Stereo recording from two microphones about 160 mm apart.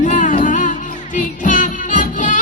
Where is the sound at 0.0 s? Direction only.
50° left (ahead or behind).